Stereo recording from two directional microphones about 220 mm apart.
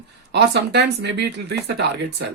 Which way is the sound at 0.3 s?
50° right (ahead or behind).